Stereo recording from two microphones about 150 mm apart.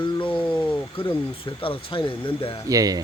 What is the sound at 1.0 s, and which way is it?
Speech, 35° left (ahead or behind).